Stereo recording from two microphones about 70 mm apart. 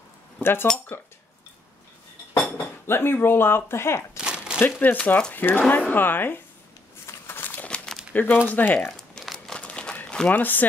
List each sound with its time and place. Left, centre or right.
0.4 s speech: left
2.5 s speech: left
4.2 s a sound: centre
4.6 s speech: left
7.1 s a sound: left
7.6 s crumpling: centre
8.1 s speech: left
9.2 s crumpling: centre
10.3 s speech: left